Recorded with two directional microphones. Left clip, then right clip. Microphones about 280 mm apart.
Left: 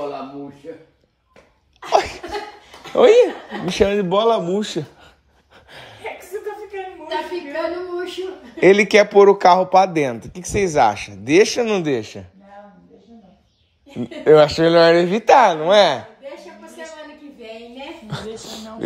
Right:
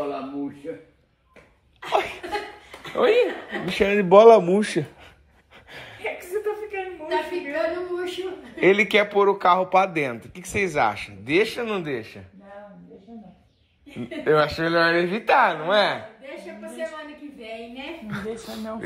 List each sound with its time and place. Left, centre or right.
1.9 s laughter: left
2.8 s speech: left
4.1 s speech: centre
7.1 s a sound: left
8.5 s speech: centre
13.9 s speech: left
18.4 s a sound: left